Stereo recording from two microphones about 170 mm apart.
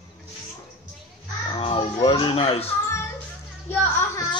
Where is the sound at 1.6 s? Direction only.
35° left (ahead or behind).